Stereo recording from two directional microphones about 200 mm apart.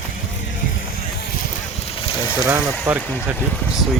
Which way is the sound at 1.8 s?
25° left (ahead or behind).